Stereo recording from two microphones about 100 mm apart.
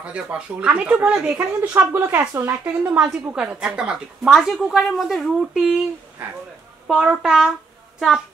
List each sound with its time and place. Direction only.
0.0 s speech: 10° right (ahead or behind)
1.8 s speech: 20° right (ahead or behind); by 5.9 s 5° right (ahead or behind)
6.9 s speech: 5° right (ahead or behind)